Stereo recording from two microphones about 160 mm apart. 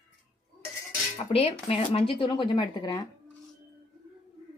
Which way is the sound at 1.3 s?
40° left (ahead or behind).